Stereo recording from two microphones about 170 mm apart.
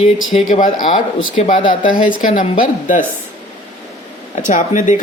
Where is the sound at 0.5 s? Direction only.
50° left (ahead or behind).